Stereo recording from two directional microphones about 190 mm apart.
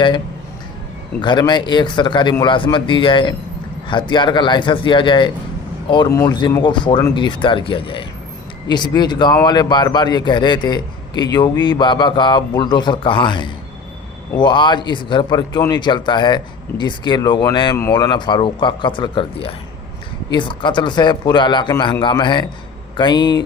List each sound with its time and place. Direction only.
1.2 s a man's voice: 25° left (ahead or behind)